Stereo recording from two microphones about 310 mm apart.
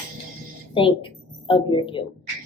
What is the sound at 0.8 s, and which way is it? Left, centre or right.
A woman's voice, centre.